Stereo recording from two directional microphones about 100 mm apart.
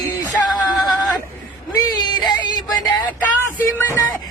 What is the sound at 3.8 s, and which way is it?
Music, 25° left (ahead or behind).